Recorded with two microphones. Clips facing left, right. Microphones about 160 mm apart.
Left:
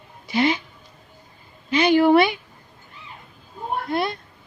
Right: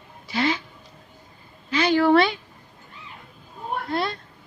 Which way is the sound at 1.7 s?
15° left (ahead or behind).